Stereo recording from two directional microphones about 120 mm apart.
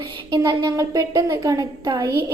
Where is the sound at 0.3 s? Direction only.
35° right (ahead or behind).